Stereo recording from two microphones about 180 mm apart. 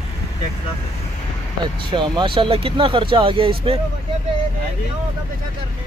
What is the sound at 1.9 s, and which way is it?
Speech, 25° right (ahead or behind).